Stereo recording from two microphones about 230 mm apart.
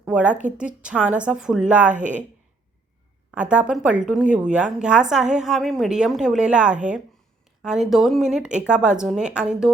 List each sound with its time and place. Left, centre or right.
0.0 s a woman's voice: centre
1.9 s speech: right
3.3 s a woman's voice: centre